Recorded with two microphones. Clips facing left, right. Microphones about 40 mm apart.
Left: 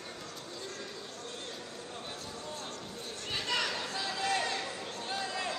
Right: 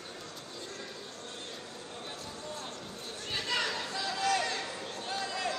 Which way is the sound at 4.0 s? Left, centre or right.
Left.